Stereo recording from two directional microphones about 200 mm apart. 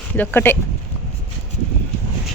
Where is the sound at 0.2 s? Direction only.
10° left (ahead or behind).